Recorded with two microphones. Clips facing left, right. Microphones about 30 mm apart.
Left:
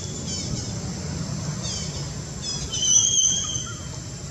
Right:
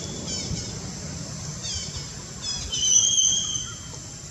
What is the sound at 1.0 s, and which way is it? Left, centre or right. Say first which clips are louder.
Vehicle: left 5 dB; centre.